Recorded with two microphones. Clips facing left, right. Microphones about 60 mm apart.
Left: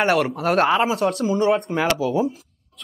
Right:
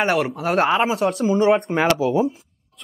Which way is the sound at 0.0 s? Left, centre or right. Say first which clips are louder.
Left 1 dB; centre.